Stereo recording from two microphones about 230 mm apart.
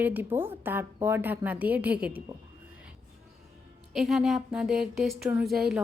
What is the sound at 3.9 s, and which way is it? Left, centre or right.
Speech, centre.